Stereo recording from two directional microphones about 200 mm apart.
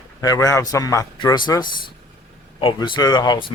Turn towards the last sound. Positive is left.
turn(degrees=25)  # may be behind; listen again after turning